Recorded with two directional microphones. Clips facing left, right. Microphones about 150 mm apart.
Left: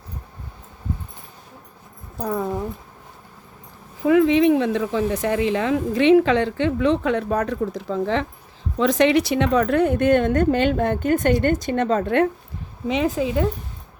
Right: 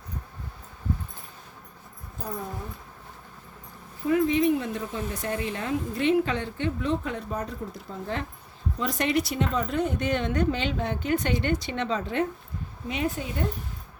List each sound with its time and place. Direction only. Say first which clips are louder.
2.1 s speech: left 10 dB; 80° left
4.0 s a woman's voice: left 7 dB; 90° left; by 12.3 s 60° left (ahead or behind)
12.9 s speech: left 9 dB; 90° left